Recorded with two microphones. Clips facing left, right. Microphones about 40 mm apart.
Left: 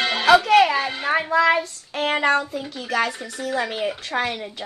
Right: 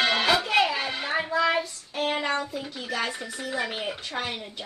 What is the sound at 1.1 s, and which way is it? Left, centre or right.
Child singing, left.